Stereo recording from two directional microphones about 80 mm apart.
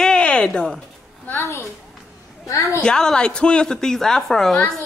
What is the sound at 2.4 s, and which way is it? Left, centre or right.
Speech, left.